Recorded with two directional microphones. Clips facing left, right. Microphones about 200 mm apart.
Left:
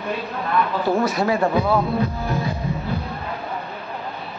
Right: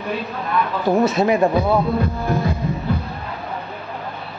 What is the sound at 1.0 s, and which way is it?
Speech, 20° right (ahead or behind).